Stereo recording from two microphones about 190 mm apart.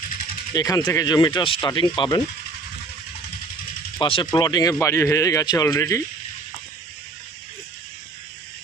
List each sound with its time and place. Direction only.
0.5 s speech: 20° left (ahead or behind)
3.9 s speech: 25° left (ahead or behind)